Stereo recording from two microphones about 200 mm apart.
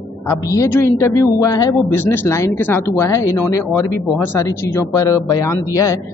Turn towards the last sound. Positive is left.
turn(degrees=15)  # may be behind; listen again after turning